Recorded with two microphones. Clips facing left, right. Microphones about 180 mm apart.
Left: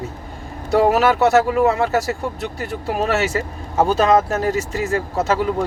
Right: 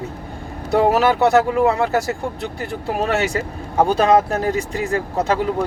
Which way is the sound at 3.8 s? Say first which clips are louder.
Even; 15° right (ahead or behind).